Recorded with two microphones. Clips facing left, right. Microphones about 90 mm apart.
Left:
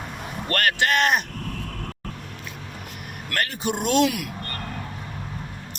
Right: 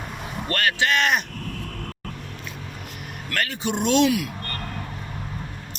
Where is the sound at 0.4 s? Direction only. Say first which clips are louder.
Left 1 dB; 50° left (ahead or behind).